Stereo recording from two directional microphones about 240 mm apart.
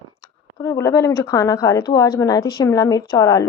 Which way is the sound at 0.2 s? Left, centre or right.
Centre.